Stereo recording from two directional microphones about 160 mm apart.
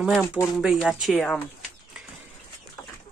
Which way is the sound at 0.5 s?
Centre (ahead or behind).